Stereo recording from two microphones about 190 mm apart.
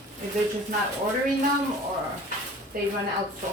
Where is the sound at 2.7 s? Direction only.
50° right (ahead or behind).